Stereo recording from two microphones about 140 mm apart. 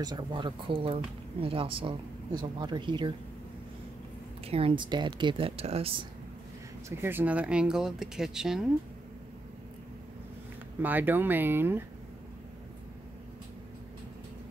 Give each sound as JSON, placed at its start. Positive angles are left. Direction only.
{"t": 0.0, "sound": "speech", "side_deg": -30}
{"t": 4.5, "sound": "speech", "side_deg": -45}
{"t": 5.6, "sound": "speech", "side_deg": -45}
{"t": 6.9, "sound": "speech", "side_deg": -15}
{"t": 10.8, "sound": "speech", "side_deg": -15}